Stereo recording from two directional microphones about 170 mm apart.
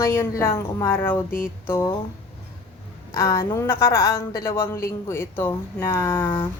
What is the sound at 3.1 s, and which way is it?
A woman's voice, 15° left (ahead or behind).